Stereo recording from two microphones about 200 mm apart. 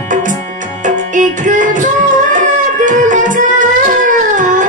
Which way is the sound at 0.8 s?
40° right (ahead or behind).